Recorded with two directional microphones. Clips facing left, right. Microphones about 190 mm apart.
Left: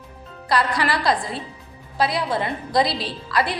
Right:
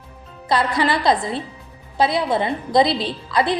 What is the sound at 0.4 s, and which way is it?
A woman's voice, 25° right (ahead or behind).